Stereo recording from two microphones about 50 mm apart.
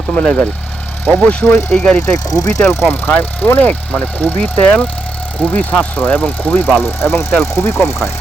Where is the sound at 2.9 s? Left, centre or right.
Left.